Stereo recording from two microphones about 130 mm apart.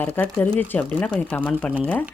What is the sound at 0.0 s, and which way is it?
Speech, 15° left (ahead or behind).